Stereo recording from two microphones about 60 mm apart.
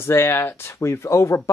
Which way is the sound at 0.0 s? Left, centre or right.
Left.